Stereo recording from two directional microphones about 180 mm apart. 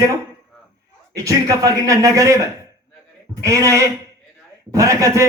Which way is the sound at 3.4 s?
15° right (ahead or behind).